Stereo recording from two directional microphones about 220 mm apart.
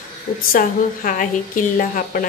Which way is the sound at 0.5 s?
35° left (ahead or behind).